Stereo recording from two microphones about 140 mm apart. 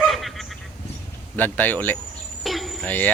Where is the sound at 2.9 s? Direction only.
10° left (ahead or behind).